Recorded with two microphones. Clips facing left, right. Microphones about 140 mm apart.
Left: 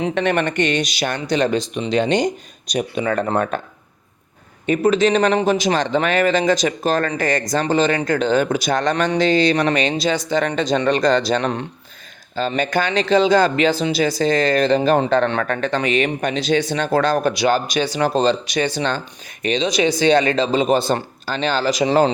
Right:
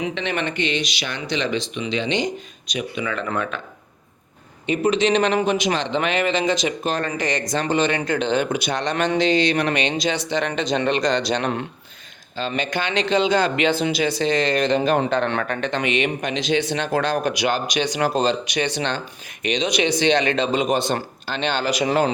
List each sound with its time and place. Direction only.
0.1 s speech: 50° left (ahead or behind)
4.6 s speech: 45° left (ahead or behind)